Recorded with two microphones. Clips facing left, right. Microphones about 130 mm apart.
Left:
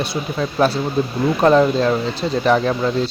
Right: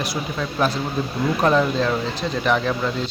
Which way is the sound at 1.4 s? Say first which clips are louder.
Left 6 dB; 30° left (ahead or behind).